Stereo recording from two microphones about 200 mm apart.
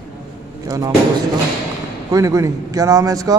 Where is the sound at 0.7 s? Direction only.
20° right (ahead or behind).